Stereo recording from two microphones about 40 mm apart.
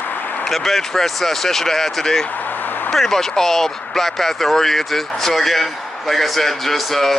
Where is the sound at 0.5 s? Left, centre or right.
Centre.